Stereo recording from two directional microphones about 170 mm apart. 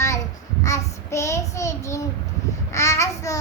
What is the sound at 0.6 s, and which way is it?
Child singing, 15° left (ahead or behind).